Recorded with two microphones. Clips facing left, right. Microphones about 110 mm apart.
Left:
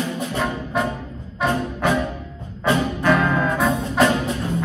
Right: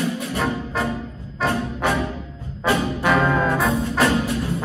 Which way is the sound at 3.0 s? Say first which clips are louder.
Even; 5° right (ahead or behind).